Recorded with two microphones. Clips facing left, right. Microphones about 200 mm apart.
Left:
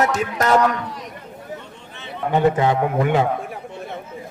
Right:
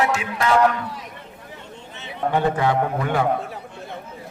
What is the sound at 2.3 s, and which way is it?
Speech, 20° left (ahead or behind).